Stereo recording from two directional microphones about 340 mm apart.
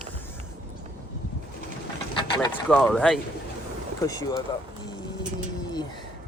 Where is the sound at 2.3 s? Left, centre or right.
Centre.